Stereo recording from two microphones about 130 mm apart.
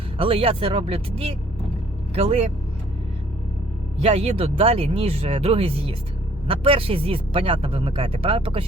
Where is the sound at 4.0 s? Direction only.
50° right (ahead or behind).